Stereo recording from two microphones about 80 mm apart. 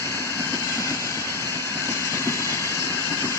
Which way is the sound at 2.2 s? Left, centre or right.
Left.